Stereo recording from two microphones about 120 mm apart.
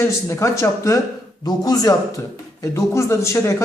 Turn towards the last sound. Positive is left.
turn(degrees=25)  # may be behind; listen again after turning